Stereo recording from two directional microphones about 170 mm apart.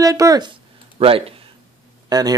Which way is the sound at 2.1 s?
25° right (ahead or behind).